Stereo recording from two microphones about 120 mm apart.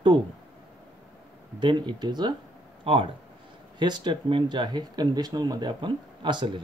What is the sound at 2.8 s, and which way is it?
Speech, 50° right (ahead or behind).